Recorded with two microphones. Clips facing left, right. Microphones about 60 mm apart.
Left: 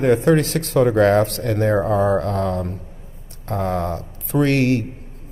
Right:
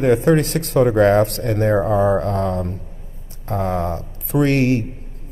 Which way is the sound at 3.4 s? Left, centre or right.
Centre.